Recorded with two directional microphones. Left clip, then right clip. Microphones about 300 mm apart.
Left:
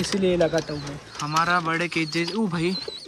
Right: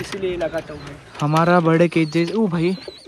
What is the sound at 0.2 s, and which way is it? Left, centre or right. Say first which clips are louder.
Speech: left 2 dB; left.